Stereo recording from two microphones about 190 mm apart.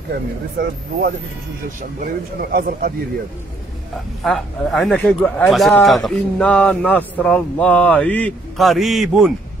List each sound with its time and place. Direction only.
0.1 s speech: 60° right (ahead or behind)
2.5 s speech: 50° right (ahead or behind)
4.2 s speech: centre (ahead or behind)